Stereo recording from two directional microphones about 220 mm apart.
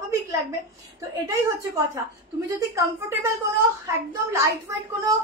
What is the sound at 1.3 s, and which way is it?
Speech, 15° right (ahead or behind).